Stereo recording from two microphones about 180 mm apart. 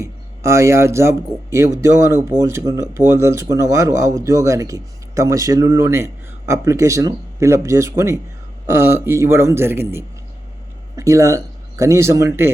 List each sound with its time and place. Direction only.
0.0 s a man's voice: 15° right (ahead or behind)